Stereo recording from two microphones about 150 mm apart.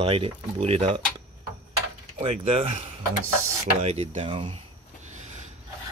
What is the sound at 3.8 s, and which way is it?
Speech, 40° right (ahead or behind).